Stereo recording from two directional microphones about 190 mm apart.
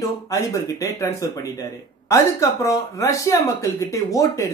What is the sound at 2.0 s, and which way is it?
Speech, 15° left (ahead or behind).